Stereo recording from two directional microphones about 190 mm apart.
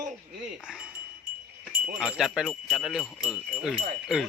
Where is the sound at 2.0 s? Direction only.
Centre (ahead or behind).